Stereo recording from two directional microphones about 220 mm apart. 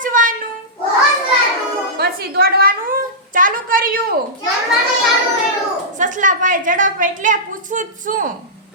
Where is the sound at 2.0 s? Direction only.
45° right (ahead or behind).